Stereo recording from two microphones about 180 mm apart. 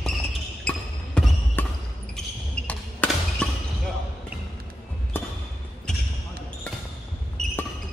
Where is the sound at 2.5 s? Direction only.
5° left (ahead or behind).